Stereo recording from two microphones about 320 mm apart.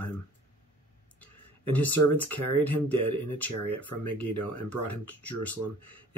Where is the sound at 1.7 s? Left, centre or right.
Centre.